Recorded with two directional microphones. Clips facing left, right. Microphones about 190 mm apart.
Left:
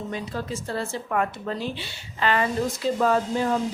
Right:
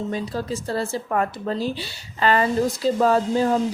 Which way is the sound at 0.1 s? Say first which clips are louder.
Right 4 dB; 35° right (ahead or behind).